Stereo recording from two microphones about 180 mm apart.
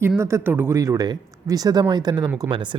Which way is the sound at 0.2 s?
15° right (ahead or behind).